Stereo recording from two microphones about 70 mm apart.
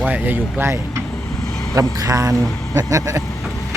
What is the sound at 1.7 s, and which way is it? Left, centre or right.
Speech, right.